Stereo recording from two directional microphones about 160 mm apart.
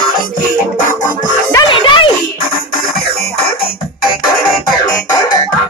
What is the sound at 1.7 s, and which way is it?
Music, 30° left (ahead or behind).